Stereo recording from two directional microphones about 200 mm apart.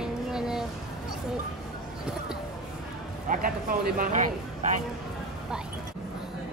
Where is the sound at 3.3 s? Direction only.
40° right (ahead or behind).